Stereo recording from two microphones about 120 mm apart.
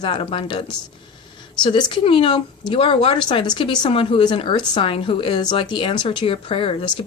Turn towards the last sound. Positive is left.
turn(degrees=55)  # may be behind; listen again after turning